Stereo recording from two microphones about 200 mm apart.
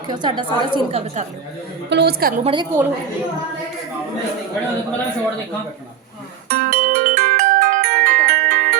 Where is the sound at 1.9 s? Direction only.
55° right (ahead or behind).